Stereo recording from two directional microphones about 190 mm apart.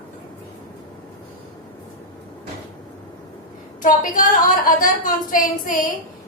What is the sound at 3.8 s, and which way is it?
A woman's voice, 45° left (ahead or behind).